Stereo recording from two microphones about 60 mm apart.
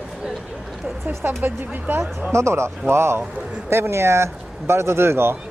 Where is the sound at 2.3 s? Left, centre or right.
Right.